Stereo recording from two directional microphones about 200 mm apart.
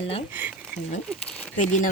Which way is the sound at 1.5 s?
40° left (ahead or behind).